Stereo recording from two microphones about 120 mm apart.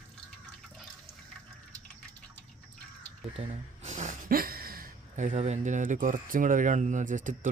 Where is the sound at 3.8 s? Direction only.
85° right.